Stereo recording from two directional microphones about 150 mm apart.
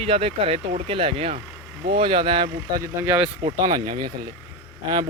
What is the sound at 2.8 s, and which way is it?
Speech, 15° right (ahead or behind).